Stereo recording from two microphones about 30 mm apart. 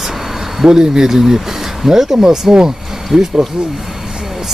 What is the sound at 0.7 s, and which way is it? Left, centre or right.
Speech, right.